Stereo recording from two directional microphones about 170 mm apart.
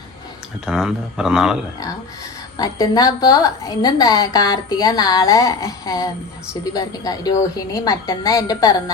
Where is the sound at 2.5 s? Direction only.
20° left (ahead or behind).